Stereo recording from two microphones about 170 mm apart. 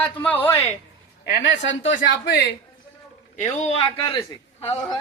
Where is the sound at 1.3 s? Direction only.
90° left.